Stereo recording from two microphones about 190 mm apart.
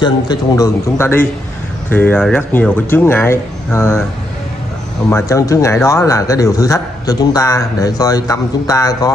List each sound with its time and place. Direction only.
0.0 s a man's voice: 20° left (ahead or behind)
5.1 s a man's voice: 15° left (ahead or behind)